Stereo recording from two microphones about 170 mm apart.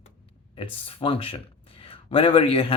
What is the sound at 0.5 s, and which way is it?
Speech, 30° left (ahead or behind).